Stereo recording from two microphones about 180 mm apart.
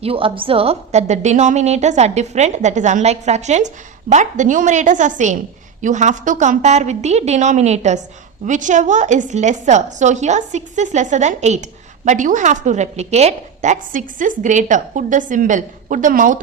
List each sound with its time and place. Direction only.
0.0 s a woman's voice: 30° right (ahead or behind); by 16.4 s 45° right (ahead or behind)